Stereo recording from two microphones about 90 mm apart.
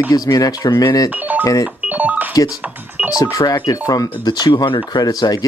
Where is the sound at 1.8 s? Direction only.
15° right (ahead or behind).